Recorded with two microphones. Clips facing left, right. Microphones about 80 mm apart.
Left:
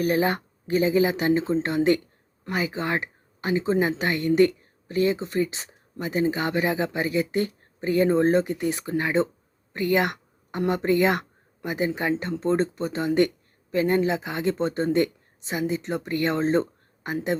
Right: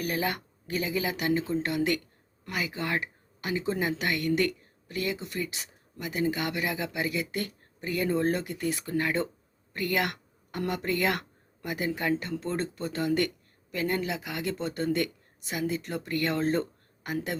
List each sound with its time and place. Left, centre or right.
0.0 s speech: left